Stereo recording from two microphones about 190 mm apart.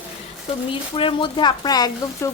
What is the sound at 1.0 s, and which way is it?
Speech, 25° left (ahead or behind).